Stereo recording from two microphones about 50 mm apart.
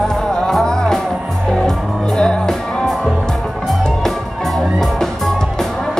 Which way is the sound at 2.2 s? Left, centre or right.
Centre.